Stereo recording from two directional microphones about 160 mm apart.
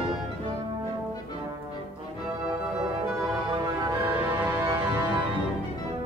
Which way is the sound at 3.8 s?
25° right (ahead or behind).